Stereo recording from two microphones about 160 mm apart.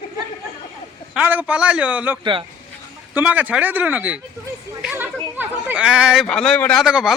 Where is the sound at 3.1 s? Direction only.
10° right (ahead or behind).